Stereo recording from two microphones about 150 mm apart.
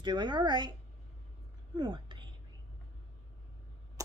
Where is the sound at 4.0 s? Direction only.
20° right (ahead or behind).